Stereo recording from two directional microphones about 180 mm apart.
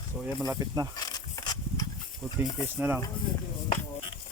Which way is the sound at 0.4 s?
20° right (ahead or behind).